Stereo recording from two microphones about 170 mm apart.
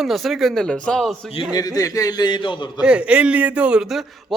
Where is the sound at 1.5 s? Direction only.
20° left (ahead or behind).